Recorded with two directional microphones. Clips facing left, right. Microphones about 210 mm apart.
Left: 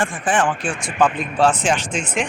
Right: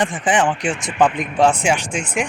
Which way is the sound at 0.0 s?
20° right (ahead or behind).